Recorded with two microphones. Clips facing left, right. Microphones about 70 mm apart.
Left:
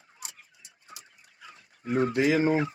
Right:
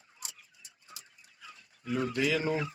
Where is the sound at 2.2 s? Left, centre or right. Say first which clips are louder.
Left 7 dB; left.